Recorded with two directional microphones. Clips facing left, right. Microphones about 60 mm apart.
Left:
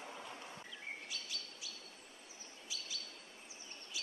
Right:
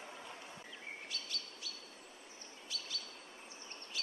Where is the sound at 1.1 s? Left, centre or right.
Centre.